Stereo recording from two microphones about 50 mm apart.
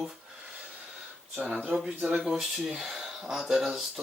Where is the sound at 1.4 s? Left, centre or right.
Right.